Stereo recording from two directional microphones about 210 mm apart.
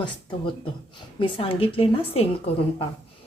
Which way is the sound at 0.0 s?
20° left (ahead or behind).